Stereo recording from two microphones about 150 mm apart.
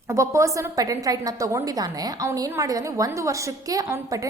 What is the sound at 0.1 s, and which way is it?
A woman's voice, 20° right (ahead or behind).